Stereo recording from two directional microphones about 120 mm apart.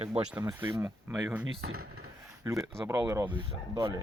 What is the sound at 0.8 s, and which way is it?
Speech, 30° right (ahead or behind).